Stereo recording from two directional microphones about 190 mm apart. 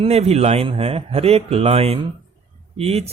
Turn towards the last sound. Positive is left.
turn(degrees=-35)  # may be behind; listen again after turning